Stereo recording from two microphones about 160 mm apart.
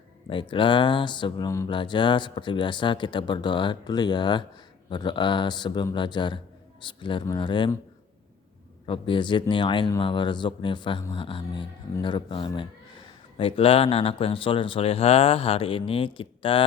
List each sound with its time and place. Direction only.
0.3 s speech: 30° left (ahead or behind)
8.9 s speech: 30° left (ahead or behind)